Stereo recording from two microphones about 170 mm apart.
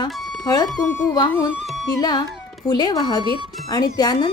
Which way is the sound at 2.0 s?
25° left (ahead or behind).